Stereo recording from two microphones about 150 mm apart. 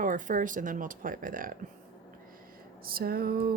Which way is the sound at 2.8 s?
85° right.